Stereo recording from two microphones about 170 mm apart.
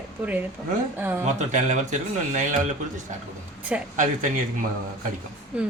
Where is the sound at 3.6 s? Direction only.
10° right (ahead or behind).